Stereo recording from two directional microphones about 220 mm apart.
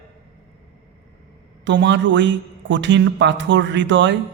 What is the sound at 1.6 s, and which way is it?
A man's voice, 55° right (ahead or behind).